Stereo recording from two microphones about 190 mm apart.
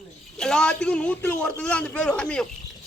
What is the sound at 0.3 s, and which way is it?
A man's voice, 5° left (ahead or behind).